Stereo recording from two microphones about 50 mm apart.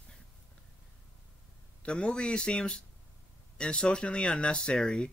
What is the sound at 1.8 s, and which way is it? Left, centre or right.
Speech, left.